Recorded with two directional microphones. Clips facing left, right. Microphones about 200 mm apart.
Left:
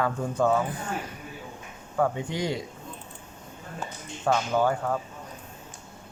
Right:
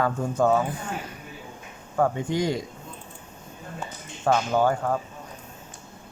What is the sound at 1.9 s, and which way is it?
Speech, 45° right (ahead or behind).